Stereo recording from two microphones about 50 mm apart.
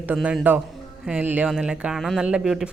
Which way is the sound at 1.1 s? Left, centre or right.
Centre.